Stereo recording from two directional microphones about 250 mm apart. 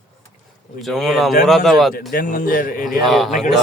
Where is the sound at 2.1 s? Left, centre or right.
Left.